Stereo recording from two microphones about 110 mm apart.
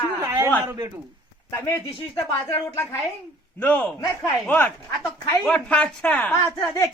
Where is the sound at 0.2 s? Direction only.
25° right (ahead or behind).